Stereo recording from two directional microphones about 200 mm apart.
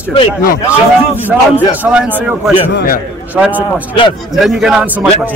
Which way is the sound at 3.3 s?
10° right (ahead or behind).